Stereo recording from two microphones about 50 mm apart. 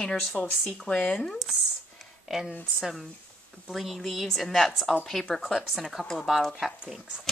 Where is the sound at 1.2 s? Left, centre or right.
Centre.